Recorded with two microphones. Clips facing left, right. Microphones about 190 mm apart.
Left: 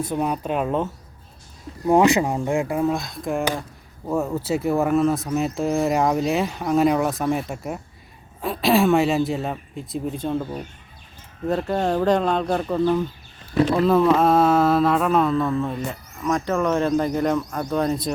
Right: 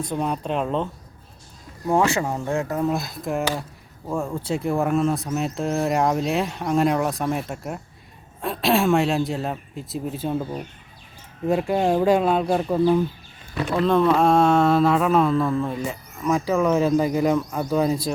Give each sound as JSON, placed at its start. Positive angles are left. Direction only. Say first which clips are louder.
{"t": 0.0, "sound": "speech", "louder": "left 2 dB", "side_deg": 5}
{"t": 1.9, "sound": "speech", "louder": "left 4 dB", "side_deg": 15}
{"t": 2.8, "sound": "speech", "louder": "left 1 dB", "side_deg": -5}
{"t": 13.5, "sound": "speech", "louder": "left 8 dB", "side_deg": 25}
{"t": 13.7, "sound": "speech", "louder": "right 1 dB", "side_deg": 5}